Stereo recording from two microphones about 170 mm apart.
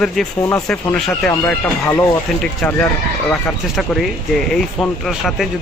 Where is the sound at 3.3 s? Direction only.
Centre (ahead or behind).